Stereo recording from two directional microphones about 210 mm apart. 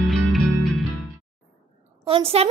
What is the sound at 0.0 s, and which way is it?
Music, centre (ahead or behind).